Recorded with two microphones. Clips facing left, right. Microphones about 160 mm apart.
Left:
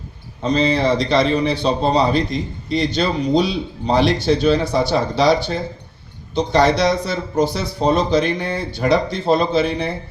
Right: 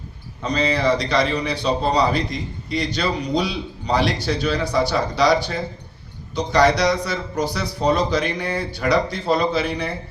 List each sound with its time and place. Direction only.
0.4 s a man's voice: 25° left (ahead or behind)